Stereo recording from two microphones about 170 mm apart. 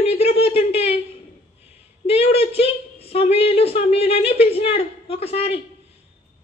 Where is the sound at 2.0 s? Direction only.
35° left (ahead or behind).